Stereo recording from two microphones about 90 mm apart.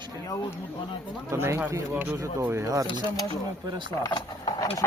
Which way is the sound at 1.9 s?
15° right (ahead or behind).